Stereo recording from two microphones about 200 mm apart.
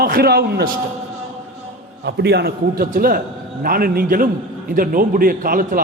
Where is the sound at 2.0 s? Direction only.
55° right (ahead or behind).